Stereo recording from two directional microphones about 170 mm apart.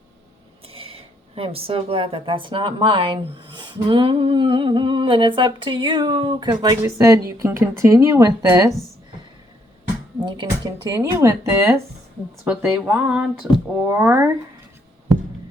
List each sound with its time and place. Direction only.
0.7 s a sound: 35° right (ahead or behind)
1.4 s speech: 35° right (ahead or behind)
10.2 s speech: 25° right (ahead or behind)
12.8 s speech: 10° right (ahead or behind)